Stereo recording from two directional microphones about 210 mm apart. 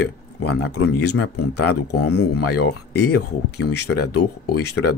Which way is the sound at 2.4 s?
50° left (ahead or behind).